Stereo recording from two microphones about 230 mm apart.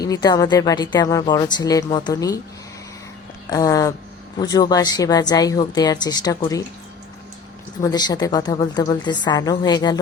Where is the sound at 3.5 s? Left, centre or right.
Centre.